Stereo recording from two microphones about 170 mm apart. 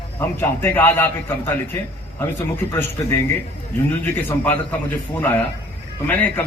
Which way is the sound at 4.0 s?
10° left (ahead or behind).